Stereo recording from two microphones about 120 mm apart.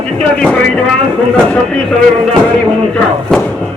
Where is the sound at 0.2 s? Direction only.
10° left (ahead or behind).